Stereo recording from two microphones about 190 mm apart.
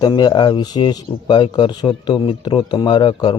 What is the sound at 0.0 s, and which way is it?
Speech, 20° left (ahead or behind).